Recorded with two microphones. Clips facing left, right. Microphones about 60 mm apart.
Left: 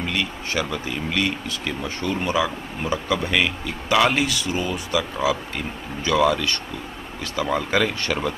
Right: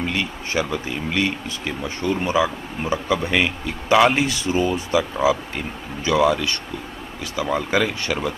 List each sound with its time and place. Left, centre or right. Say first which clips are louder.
0.0 s a man's voice: right 1 dB; right
7.4 s speech: right 1 dB; centre